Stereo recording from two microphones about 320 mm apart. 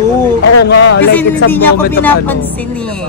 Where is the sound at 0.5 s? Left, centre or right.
Left.